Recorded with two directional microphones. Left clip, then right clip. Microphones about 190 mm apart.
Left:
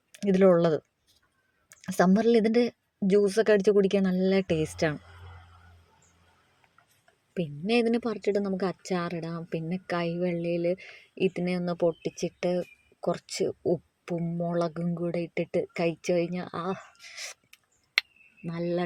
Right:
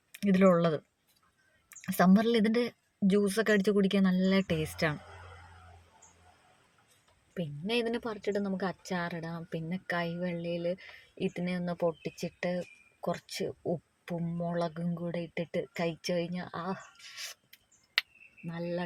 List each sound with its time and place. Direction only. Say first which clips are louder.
0.1 s speech: left 4 dB; 10° left (ahead or behind)
1.7 s a sound: left 3 dB; 10° left (ahead or behind)
2.1 s speech: left 5 dB; 10° left (ahead or behind)
7.3 s speech: left 6 dB; 25° left (ahead or behind)
18.4 s speech: left 6 dB; 25° left (ahead or behind)